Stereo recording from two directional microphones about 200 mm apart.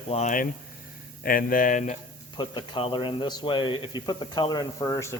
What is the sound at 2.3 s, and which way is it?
A man's voice, 20° left (ahead or behind).